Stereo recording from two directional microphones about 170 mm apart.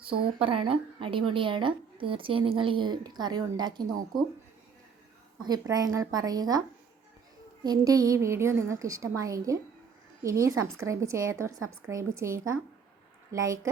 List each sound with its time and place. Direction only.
0.4 s a woman's voice: 30° right (ahead or behind)
5.4 s a woman's voice: 20° right (ahead or behind)
7.6 s a woman's voice: 20° right (ahead or behind)